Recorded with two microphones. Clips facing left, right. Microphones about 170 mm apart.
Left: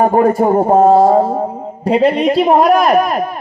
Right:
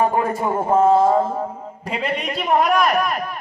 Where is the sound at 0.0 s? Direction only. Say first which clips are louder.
Left 9 dB; 45° left (ahead or behind).